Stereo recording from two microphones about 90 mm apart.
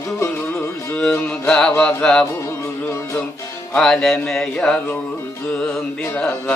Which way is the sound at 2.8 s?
30° left (ahead or behind).